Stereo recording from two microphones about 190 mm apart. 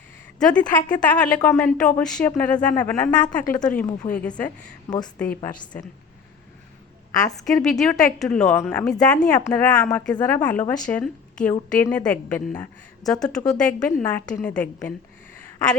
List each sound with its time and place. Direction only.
0.3 s a woman's voice: 5° left (ahead or behind)
4.0 s a woman's voice: 25° left (ahead or behind)
5.2 s a woman's voice: 5° left (ahead or behind)
7.1 s a woman's voice: 20° left (ahead or behind)
7.4 s a woman's voice: 5° left (ahead or behind)